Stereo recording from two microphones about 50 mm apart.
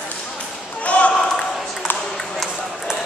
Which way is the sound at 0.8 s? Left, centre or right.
Left.